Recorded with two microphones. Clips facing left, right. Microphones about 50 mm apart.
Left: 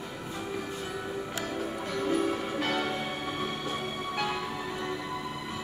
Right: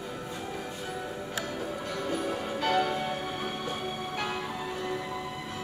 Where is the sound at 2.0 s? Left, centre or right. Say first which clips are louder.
Left 4 dB; centre.